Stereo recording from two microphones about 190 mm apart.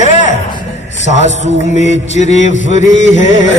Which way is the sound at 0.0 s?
40° left (ahead or behind).